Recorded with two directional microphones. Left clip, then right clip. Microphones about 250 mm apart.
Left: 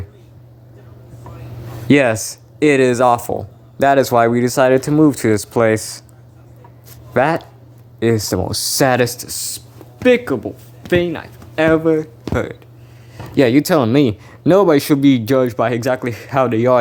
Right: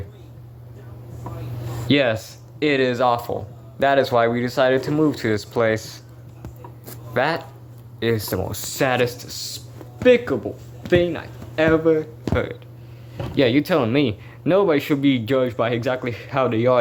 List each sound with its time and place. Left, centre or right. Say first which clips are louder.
1.9 s a man's voice: left 6 dB; left
7.1 s a man's voice: left 6 dB; left